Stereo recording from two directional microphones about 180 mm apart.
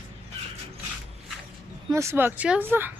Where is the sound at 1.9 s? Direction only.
15° right (ahead or behind).